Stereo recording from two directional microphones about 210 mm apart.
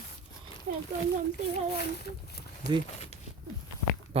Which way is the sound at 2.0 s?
50° left (ahead or behind).